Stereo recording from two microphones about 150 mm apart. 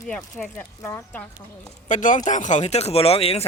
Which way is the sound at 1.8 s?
60° left (ahead or behind).